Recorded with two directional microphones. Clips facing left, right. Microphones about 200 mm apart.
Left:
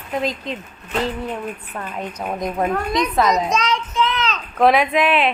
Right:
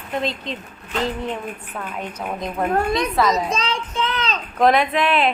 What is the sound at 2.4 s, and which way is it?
A child's voice, 15° left (ahead or behind).